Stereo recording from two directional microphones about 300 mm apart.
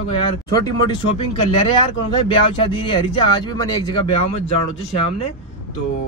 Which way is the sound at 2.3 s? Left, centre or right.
Centre.